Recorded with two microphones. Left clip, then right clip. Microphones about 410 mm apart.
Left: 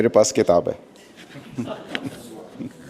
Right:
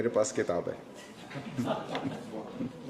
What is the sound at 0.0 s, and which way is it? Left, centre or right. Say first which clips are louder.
Speech: left 12 dB; left.